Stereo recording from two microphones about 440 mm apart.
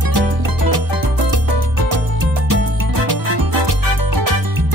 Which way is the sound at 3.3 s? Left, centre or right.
Right.